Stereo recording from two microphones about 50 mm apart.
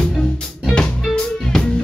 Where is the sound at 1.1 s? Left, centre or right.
Centre.